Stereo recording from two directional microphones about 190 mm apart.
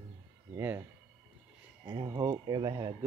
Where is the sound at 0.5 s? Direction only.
10° right (ahead or behind).